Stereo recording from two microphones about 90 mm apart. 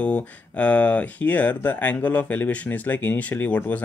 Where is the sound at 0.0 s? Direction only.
15° left (ahead or behind).